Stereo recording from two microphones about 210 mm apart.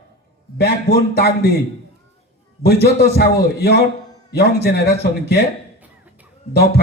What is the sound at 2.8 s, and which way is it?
A man's voice, 50° left (ahead or behind).